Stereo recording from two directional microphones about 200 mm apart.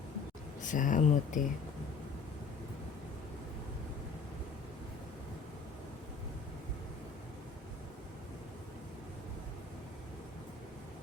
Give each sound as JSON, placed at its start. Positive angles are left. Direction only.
{"t": 0.6, "sound": "speech", "side_deg": 40}